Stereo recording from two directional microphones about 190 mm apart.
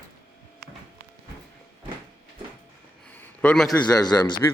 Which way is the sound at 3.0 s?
5° left (ahead or behind).